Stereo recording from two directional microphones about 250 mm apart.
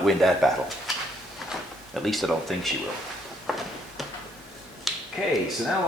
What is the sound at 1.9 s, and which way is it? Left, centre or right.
Speech, centre.